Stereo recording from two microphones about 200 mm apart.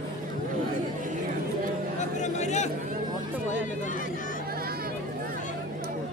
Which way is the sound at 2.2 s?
35° left (ahead or behind).